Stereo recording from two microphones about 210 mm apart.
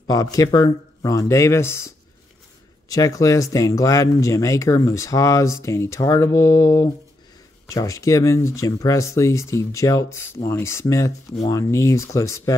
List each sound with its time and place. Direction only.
0.0 s speech: 15° left (ahead or behind)
2.9 s speech: 15° left (ahead or behind)